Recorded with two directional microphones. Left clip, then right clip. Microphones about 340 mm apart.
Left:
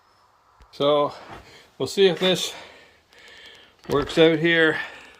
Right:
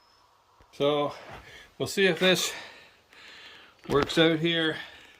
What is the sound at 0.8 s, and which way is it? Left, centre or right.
A man's voice, centre.